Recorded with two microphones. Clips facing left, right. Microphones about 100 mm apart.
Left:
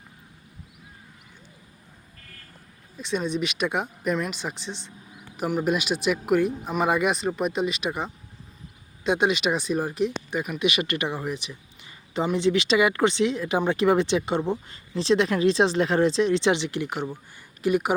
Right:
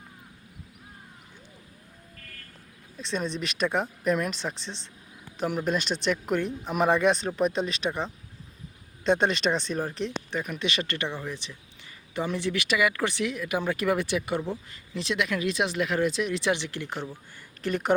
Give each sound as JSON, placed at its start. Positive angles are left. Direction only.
{"t": 3.0, "sound": "speech", "side_deg": 5}